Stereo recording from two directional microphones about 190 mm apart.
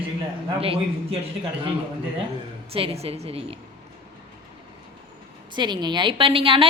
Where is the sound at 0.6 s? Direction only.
30° right (ahead or behind).